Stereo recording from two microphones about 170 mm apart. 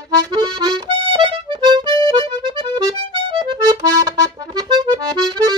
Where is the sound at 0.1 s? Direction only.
25° right (ahead or behind).